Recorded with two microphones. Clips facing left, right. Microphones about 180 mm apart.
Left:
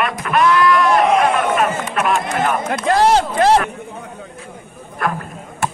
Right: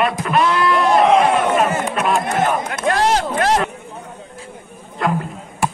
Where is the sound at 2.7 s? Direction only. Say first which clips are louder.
Left 3 dB; 30° left (ahead or behind).